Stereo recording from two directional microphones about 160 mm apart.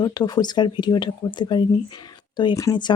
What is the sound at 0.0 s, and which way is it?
Speech, 25° left (ahead or behind).